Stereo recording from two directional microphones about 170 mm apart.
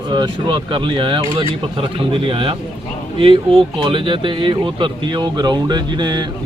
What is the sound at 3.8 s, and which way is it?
Speech, 30° right (ahead or behind).